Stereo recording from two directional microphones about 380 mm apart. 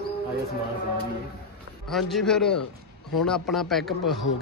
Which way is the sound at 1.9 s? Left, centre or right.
Centre.